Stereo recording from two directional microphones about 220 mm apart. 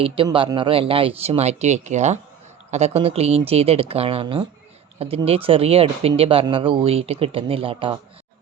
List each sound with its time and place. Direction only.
0.0 s speech: 25° right (ahead or behind)